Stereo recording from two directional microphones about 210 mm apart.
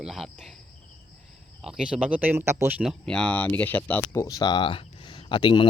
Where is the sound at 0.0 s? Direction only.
Centre (ahead or behind).